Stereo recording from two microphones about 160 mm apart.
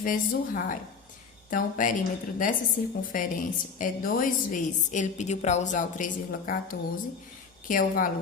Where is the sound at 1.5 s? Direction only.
55° left (ahead or behind).